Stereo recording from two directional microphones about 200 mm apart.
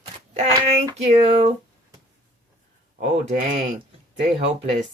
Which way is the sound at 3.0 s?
35° right (ahead or behind).